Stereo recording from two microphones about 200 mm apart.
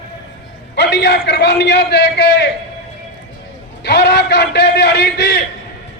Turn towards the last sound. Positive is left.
turn(degrees=55)  # may be behind; listen again after turning